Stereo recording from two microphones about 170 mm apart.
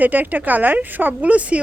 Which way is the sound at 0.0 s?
10° right (ahead or behind).